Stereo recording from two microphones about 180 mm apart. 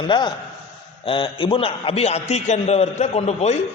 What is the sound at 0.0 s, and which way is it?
A man's voice, 25° left (ahead or behind).